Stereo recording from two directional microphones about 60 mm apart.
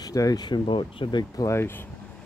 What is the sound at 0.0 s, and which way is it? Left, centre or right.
Speech, left.